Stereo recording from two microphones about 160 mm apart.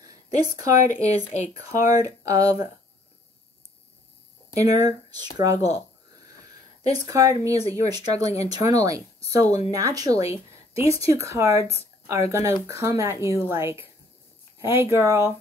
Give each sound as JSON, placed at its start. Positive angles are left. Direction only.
{"t": 0.0, "sound": "a sound", "side_deg": -25}
{"t": 1.5, "sound": "speech", "side_deg": -25}
{"t": 4.6, "sound": "speech", "side_deg": -20}
{"t": 7.1, "sound": "speech", "side_deg": -20}